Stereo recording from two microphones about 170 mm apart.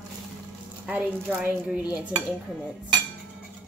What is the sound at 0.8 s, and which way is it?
Speech, 10° right (ahead or behind).